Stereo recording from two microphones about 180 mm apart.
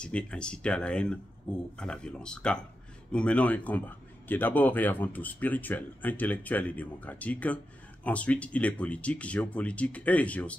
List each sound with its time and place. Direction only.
0.0 s speech: 5° left (ahead or behind)